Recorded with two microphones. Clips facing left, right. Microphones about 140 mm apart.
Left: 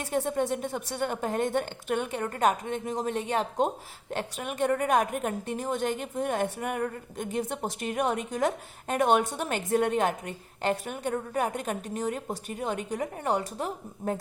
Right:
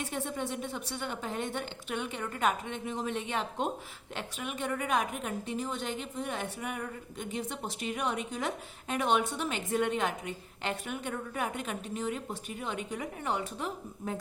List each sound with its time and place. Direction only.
0.0 s a woman's voice: 40° left (ahead or behind)